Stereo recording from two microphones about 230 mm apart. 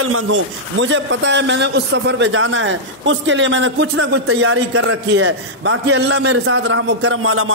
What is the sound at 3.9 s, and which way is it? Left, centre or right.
A man's voice, right.